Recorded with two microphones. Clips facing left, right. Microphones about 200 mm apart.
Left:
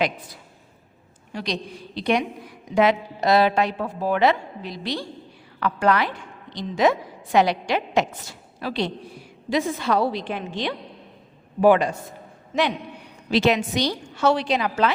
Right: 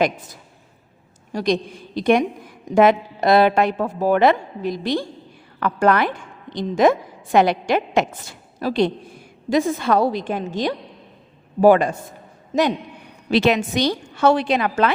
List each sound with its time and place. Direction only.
1.3 s a woman's voice: 45° right (ahead or behind)
13.3 s a woman's voice: 55° right (ahead or behind)